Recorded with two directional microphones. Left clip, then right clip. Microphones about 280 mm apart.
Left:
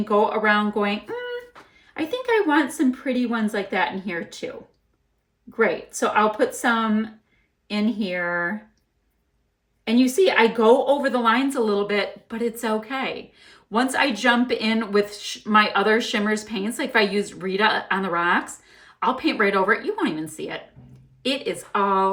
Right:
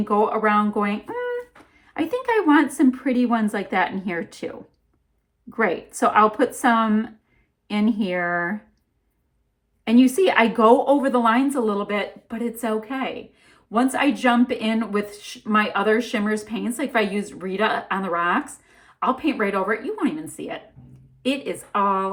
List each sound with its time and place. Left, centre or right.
0.6 s a woman's voice: centre
5.6 s a woman's voice: centre
10.0 s a woman's voice: centre